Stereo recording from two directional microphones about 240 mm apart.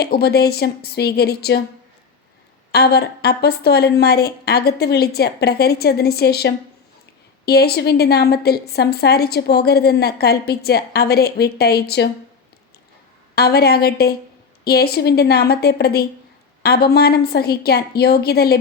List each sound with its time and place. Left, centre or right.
0.0 s a woman's voice: left
2.7 s a woman's voice: left
13.3 s a woman's voice: left